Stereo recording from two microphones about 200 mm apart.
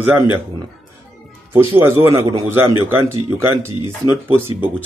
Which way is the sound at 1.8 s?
10° right (ahead or behind).